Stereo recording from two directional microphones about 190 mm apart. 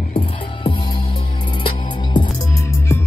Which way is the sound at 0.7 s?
25° left (ahead or behind).